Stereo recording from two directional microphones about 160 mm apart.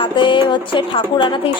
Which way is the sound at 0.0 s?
30° left (ahead or behind).